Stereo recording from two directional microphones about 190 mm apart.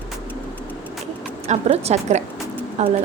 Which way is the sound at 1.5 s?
35° right (ahead or behind).